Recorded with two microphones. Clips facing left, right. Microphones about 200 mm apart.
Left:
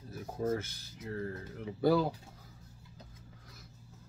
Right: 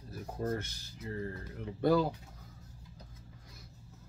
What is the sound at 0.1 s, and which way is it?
Speech, centre (ahead or behind).